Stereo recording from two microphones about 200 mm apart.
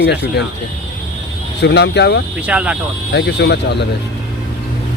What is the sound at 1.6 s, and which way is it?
Speech, 55° left (ahead or behind).